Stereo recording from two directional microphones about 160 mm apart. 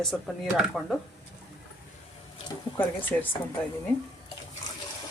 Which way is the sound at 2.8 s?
10° left (ahead or behind).